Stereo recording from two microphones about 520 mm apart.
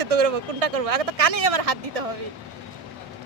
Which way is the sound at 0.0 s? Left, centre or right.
Right.